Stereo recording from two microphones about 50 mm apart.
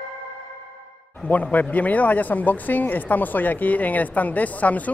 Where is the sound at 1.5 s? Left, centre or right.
Left.